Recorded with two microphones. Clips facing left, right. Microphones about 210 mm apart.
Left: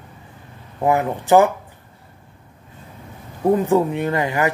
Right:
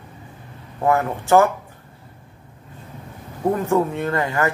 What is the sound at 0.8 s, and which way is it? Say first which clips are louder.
Speech: left 1 dB; 15° left (ahead or behind).